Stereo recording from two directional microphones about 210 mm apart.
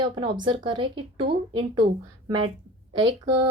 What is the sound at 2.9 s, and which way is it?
Speech, 20° right (ahead or behind).